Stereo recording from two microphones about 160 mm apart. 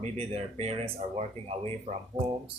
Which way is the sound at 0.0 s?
40° right (ahead or behind).